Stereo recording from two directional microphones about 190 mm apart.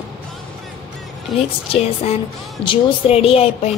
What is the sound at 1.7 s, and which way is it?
Music, 30° left (ahead or behind).